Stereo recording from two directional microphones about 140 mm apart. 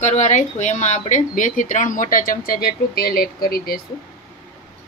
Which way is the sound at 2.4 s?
90° left.